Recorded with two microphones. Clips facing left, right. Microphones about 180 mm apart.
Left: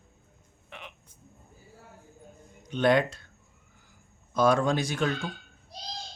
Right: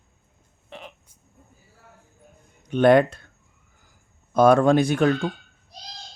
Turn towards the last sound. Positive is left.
turn(degrees=-60)  # may be behind; listen again after turning